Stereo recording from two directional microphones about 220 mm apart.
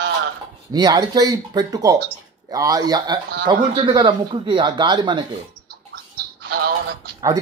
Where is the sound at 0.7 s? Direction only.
15° right (ahead or behind).